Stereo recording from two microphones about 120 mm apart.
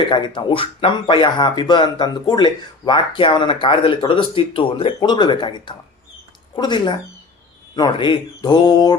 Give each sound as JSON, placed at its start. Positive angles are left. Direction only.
{"t": 0.1, "sound": "speech", "side_deg": 40}